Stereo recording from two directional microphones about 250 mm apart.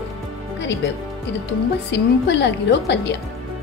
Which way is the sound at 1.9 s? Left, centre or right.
Left.